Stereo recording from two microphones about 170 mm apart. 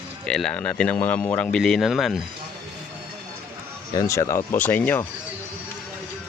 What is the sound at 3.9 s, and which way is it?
Speech, 20° left (ahead or behind).